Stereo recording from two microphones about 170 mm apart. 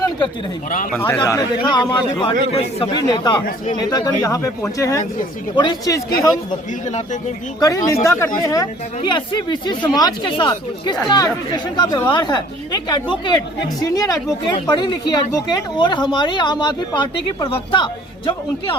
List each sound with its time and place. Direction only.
0.9 s speech: 10° left (ahead or behind)
1.4 s a man's voice: 30° left (ahead or behind)
6.8 s speech: 45° left (ahead or behind)
7.6 s speech: 20° left (ahead or behind)